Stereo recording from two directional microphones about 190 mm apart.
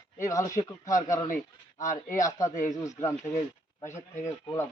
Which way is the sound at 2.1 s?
15° left (ahead or behind).